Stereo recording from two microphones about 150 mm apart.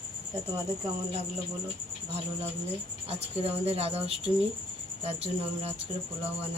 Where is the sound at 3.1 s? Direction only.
40° right (ahead or behind).